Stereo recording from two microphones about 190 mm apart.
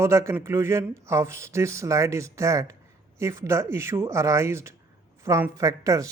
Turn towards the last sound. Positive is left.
turn(degrees=-15)  # may be behind; listen again after turning